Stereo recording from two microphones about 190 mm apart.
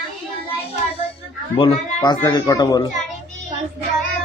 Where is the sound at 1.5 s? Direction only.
30° left (ahead or behind).